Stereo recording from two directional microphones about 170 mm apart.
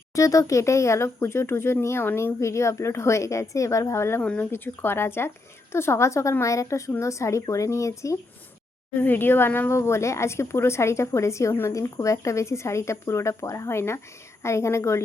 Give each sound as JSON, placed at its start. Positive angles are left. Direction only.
{"t": 0.1, "sound": "speech", "side_deg": 20}